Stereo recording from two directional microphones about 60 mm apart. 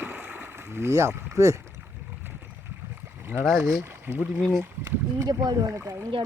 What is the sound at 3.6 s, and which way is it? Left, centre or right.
Speech, right.